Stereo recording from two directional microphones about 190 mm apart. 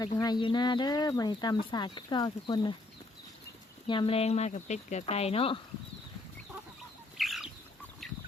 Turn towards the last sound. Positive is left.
turn(degrees=0)  # may be behind; listen again after turning